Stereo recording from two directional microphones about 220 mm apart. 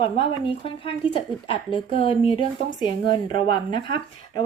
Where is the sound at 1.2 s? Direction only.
25° left (ahead or behind).